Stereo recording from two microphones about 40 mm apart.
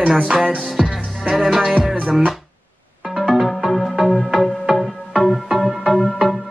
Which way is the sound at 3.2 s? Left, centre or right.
Centre.